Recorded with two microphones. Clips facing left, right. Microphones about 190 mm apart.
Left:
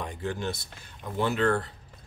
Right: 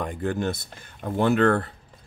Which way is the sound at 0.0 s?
50° right (ahead or behind).